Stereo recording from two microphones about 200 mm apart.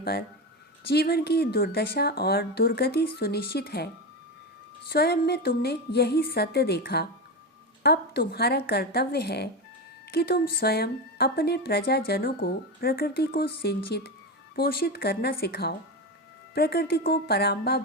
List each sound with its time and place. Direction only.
0.0 s a woman's voice: 50° left (ahead or behind)
4.9 s a woman's voice: 50° left (ahead or behind)